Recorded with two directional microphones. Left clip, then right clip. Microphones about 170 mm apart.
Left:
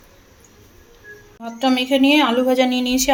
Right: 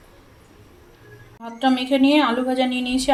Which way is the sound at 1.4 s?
20° left (ahead or behind).